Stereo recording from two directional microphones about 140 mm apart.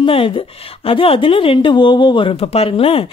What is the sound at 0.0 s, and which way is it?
A woman's voice, 40° left (ahead or behind).